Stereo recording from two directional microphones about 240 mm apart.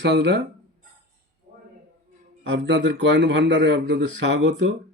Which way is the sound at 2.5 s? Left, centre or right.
Right.